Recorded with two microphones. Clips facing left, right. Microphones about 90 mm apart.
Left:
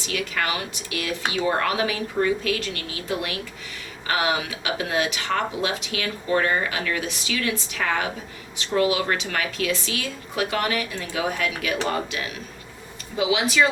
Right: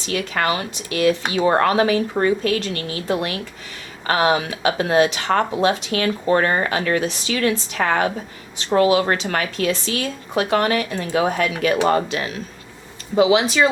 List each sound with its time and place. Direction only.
0.0 s speech: 40° right (ahead or behind)